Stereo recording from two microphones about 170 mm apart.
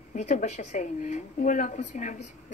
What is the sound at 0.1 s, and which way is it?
Speech, 45° left (ahead or behind).